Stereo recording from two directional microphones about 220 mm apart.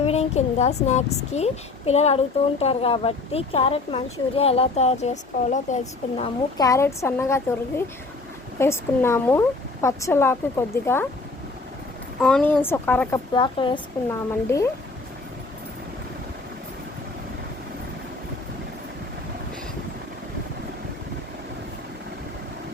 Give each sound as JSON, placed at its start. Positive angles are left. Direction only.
{"t": 0.0, "sound": "speech", "side_deg": 30}
{"t": 6.7, "sound": "a woman's voice", "side_deg": 10}
{"t": 12.2, "sound": "a woman's voice", "side_deg": 5}
{"t": 13.3, "sound": "a woman's voice", "side_deg": 20}